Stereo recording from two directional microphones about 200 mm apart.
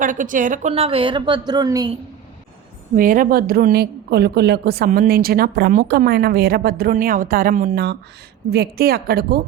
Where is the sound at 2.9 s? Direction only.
45° right (ahead or behind).